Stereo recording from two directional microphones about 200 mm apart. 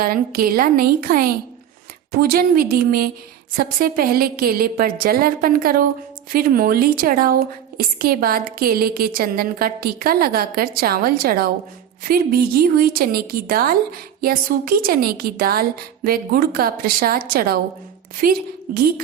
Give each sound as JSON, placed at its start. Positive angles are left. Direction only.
{"t": 0.0, "sound": "a woman's voice", "side_deg": -45}